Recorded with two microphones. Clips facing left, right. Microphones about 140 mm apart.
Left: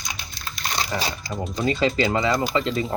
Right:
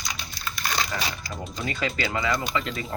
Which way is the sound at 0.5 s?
30° left (ahead or behind).